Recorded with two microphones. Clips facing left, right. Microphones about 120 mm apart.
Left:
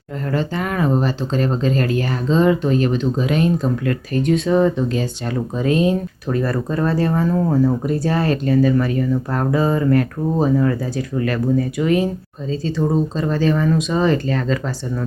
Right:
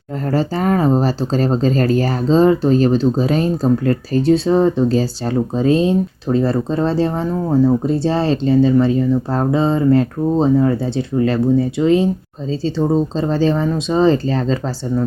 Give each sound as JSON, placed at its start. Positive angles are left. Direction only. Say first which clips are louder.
{"t": 0.3, "sound": "speech", "louder": "right 5 dB", "side_deg": -35}
{"t": 7.5, "sound": "speech", "louder": "right 3 dB", "side_deg": -25}